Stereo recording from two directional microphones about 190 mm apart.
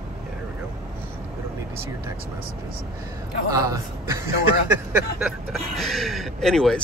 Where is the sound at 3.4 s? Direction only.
15° right (ahead or behind).